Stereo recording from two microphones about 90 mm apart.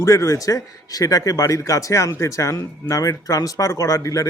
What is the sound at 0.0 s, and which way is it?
Speech, 35° left (ahead or behind).